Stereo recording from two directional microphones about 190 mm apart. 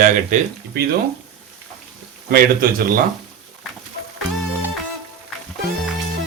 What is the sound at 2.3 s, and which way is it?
Speech, 50° right (ahead or behind).